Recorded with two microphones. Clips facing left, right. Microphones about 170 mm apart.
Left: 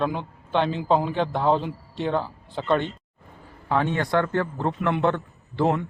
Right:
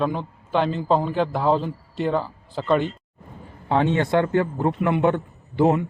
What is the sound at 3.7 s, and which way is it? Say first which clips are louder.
A man's voice: right 3 dB; 25° right (ahead or behind).